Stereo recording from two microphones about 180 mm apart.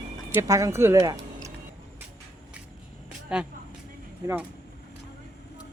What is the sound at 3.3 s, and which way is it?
Speech, 5° right (ahead or behind).